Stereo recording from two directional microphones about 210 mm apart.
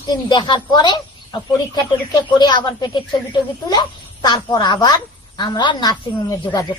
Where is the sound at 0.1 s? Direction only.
20° left (ahead or behind).